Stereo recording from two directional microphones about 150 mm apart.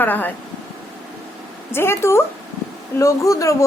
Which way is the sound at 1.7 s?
15° left (ahead or behind).